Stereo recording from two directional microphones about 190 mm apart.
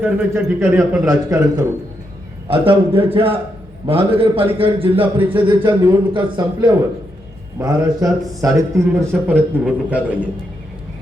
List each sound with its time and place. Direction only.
0.0 s a man's voice: 5° right (ahead or behind)